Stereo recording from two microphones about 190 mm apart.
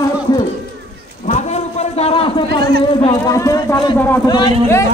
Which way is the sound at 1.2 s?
40° left (ahead or behind).